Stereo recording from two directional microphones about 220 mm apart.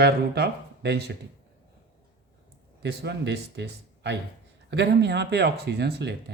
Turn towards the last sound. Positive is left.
turn(degrees=-50)  # may be behind; listen again after turning